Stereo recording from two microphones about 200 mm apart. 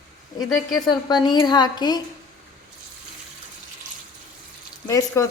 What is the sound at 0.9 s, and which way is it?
A woman's voice, 20° left (ahead or behind).